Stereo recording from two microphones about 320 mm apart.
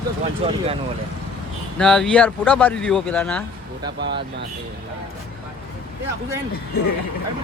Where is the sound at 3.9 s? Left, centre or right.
Right.